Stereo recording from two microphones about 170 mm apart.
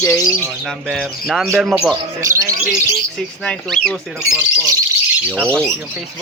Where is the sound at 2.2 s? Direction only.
20° right (ahead or behind).